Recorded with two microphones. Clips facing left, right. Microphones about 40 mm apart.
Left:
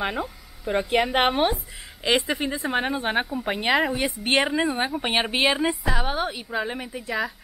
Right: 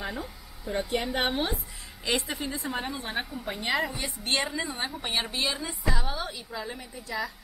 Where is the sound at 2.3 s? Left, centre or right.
Left.